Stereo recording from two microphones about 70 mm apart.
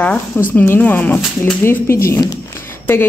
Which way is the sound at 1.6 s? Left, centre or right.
Left.